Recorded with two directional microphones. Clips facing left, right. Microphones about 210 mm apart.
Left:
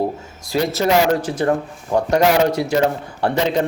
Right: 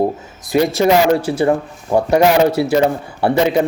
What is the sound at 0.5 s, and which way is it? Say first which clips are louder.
A man's voice: right 4 dB; 10° right (ahead or behind).